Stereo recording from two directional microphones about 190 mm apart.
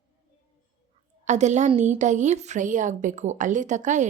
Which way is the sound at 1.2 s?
40° right (ahead or behind).